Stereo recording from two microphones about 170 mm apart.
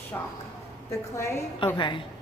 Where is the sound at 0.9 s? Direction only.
15° left (ahead or behind).